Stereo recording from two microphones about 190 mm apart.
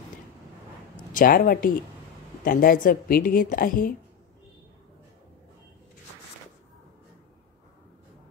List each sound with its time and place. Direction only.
1.1 s a woman's voice: 45° left (ahead or behind)